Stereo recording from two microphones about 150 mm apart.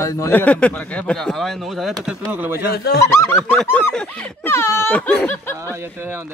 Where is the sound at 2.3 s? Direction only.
10° right (ahead or behind).